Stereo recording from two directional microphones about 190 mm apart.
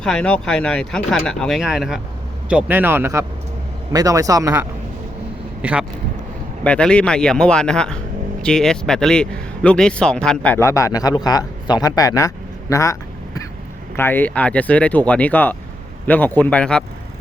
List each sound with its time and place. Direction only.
0.0 s speech: 5° left (ahead or behind); by 4.6 s 20° right (ahead or behind)
5.6 s speech: 10° right (ahead or behind)
6.7 s speech: 5° left (ahead or behind)